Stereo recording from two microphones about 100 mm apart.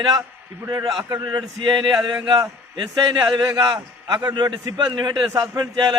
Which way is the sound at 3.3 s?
35° right (ahead or behind).